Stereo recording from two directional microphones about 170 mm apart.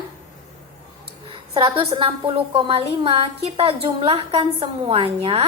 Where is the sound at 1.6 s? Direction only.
30° right (ahead or behind).